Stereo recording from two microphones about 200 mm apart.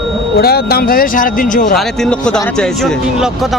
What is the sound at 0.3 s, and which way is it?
Speech, 50° left (ahead or behind).